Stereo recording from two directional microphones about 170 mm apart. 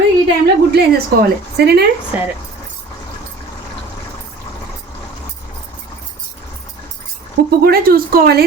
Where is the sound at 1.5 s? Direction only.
75° right (ahead or behind).